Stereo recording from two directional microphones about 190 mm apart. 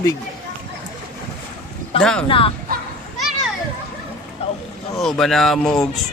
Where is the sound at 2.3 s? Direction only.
30° left (ahead or behind).